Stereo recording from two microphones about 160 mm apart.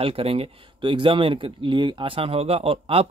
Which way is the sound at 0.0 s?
35° right (ahead or behind).